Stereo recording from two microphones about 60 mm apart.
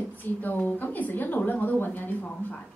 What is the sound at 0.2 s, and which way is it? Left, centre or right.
A woman's voice, left.